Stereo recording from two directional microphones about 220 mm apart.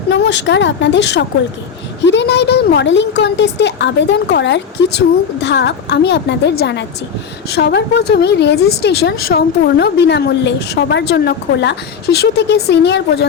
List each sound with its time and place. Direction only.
0.1 s a woman's voice: 55° left (ahead or behind)